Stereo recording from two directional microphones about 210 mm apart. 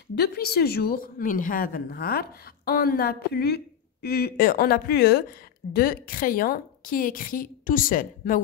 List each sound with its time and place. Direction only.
0.1 s a woman's voice: 50° left (ahead or behind)